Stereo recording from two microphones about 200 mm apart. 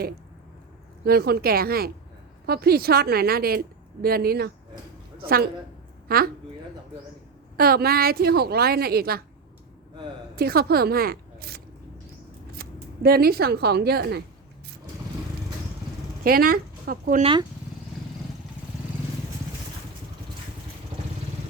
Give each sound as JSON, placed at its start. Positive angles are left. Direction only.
{"t": 1.0, "sound": "a woman's voice", "side_deg": -50}
{"t": 7.5, "sound": "a woman's voice", "side_deg": -50}
{"t": 10.3, "sound": "speech", "side_deg": -50}
{"t": 16.2, "sound": "speech", "side_deg": -45}